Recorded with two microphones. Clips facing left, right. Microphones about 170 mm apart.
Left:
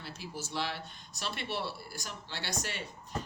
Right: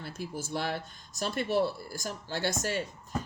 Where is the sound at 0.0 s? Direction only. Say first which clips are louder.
Right 5 dB; 50° right (ahead or behind).